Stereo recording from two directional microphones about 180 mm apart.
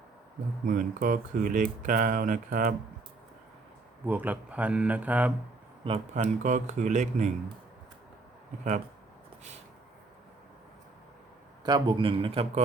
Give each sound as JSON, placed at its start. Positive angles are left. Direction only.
{"t": 0.6, "sound": "speech", "side_deg": -45}
{"t": 4.0, "sound": "speech", "side_deg": -10}
{"t": 5.8, "sound": "speech", "side_deg": -35}
{"t": 11.6, "sound": "a man's voice", "side_deg": -25}